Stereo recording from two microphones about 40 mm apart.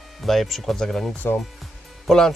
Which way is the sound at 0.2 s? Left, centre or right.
Centre.